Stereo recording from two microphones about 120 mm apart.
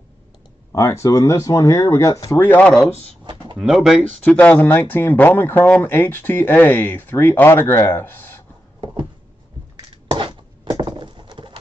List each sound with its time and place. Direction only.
0.7 s speech: 25° left (ahead or behind)
2.4 s speech: 15° left (ahead or behind)
3.5 s speech: centre (ahead or behind)
4.4 s speech: 15° left (ahead or behind)
10.0 s a sound: 40° right (ahead or behind)